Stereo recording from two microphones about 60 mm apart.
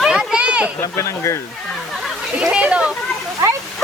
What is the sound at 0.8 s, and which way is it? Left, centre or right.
Speech, left.